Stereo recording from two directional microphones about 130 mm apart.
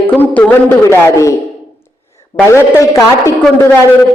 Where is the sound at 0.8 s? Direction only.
25° left (ahead or behind).